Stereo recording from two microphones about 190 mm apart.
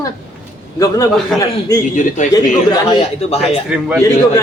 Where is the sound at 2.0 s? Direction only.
40° left (ahead or behind).